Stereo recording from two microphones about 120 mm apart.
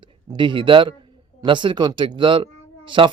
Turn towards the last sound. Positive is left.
turn(degrees=-45)  # may be behind; listen again after turning